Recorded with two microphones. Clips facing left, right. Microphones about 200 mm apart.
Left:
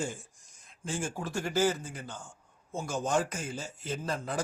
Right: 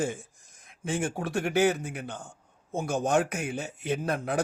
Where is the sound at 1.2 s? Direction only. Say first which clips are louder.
Right 4 dB; 65° right (ahead or behind).